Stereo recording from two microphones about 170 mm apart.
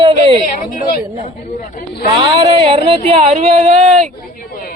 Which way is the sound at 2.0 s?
30° right (ahead or behind).